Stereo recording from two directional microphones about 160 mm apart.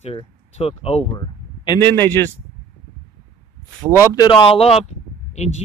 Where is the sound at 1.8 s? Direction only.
15° left (ahead or behind).